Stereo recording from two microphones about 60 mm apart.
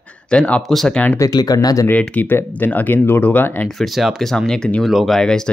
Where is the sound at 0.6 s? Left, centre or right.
Centre.